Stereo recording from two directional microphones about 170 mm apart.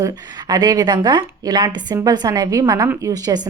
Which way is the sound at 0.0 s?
20° right (ahead or behind).